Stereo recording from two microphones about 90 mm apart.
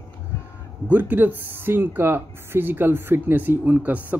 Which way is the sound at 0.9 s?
20° right (ahead or behind).